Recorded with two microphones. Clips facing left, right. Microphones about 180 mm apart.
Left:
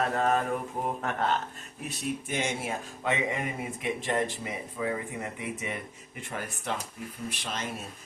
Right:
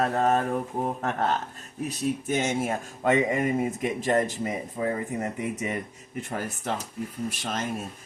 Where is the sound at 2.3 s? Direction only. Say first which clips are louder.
Right 6 dB; 40° right (ahead or behind).